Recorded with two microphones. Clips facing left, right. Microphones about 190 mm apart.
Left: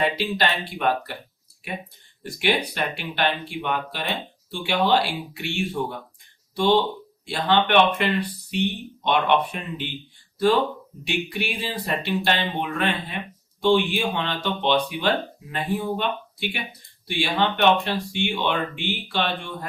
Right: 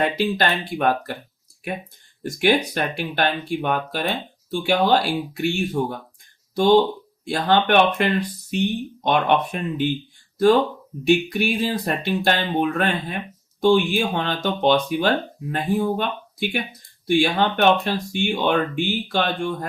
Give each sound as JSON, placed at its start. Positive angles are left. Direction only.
{"t": 0.0, "sound": "speech", "side_deg": -45}
{"t": 2.2, "sound": "speech", "side_deg": -45}